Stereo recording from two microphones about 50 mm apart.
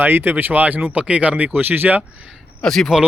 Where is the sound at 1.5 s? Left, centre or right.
Right.